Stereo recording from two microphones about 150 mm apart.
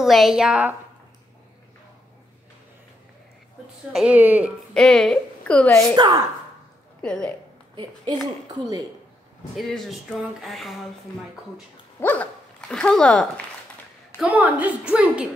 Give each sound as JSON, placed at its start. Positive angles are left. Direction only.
{"t": 0.0, "sound": "a woman's voice", "side_deg": 0}
{"t": 3.9, "sound": "a woman's voice", "side_deg": -10}
{"t": 4.7, "sound": "a woman's voice", "side_deg": 5}
{"t": 5.9, "sound": "a woman's voice", "side_deg": -25}
{"t": 7.0, "sound": "a woman's voice", "side_deg": 5}
{"t": 7.7, "sound": "a woman's voice", "side_deg": -30}
{"t": 9.6, "sound": "a woman's voice", "side_deg": 0}
{"t": 12.0, "sound": "speech", "side_deg": 10}
{"t": 14.1, "sound": "a woman's voice", "side_deg": -10}